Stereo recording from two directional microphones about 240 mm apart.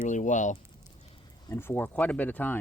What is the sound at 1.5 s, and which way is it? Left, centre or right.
Speech, centre.